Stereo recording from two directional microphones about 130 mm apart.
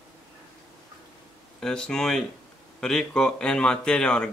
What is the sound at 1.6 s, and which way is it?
Speech, 5° left (ahead or behind).